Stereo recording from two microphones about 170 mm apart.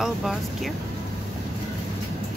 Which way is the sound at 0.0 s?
Centre (ahead or behind).